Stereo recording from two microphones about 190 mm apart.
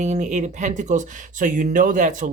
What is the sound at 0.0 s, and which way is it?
Speech, 40° right (ahead or behind).